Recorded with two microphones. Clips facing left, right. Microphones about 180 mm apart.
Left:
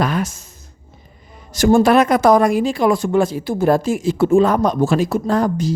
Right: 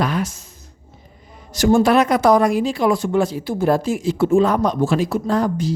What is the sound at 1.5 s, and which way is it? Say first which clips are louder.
Speech: left 2 dB; 50° left (ahead or behind).